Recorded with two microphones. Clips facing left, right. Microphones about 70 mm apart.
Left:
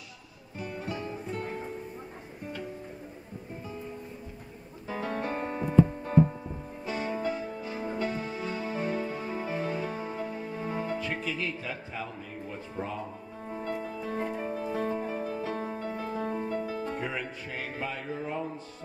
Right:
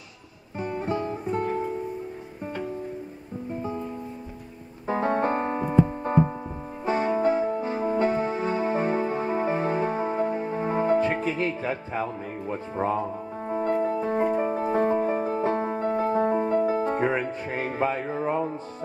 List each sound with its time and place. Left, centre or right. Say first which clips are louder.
0.6 s music: right 8 dB; right
4.8 s keyboard: right 9 dB; right
6.9 s music: right 9 dB; right